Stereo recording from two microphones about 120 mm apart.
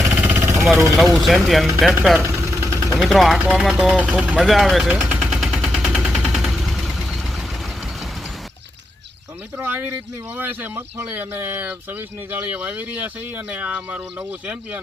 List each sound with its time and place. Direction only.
0.1 s vehicle: 15° right (ahead or behind)
0.9 s speech: centre (ahead or behind)
2.2 s vehicle: 20° right (ahead or behind)
3.0 s speech: centre (ahead or behind)
4.9 s machine gun: 10° right (ahead or behind)
9.6 s speech: 15° right (ahead or behind)